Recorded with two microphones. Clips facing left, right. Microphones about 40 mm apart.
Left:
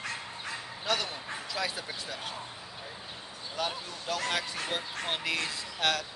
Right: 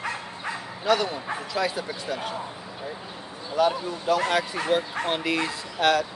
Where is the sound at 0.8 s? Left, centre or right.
Centre.